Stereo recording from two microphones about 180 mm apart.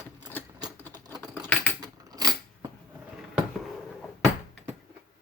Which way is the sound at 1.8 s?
20° right (ahead or behind).